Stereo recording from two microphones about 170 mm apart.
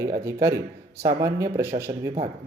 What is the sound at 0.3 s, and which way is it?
A man's voice, 15° right (ahead or behind).